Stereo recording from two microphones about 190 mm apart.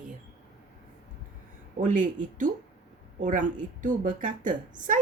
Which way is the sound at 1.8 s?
40° right (ahead or behind).